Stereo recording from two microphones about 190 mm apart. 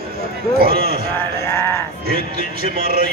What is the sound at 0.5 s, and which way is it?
Speech, 55° right (ahead or behind).